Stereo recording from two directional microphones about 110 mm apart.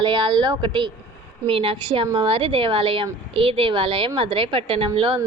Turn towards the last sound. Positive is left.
turn(degrees=-50)  # may be behind; listen again after turning